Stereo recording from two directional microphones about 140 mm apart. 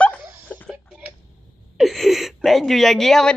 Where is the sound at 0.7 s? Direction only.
10° right (ahead or behind).